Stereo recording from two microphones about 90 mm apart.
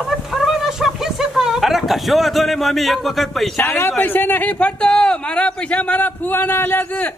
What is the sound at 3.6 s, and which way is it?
A man's voice, 25° left (ahead or behind).